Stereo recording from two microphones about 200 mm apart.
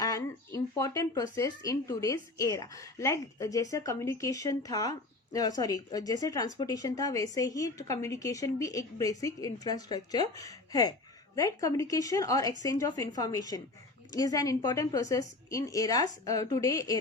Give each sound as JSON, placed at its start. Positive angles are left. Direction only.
{"t": 0.0, "sound": "speech", "side_deg": 15}